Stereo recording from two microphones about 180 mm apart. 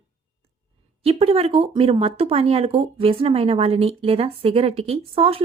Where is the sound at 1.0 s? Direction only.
35° right (ahead or behind).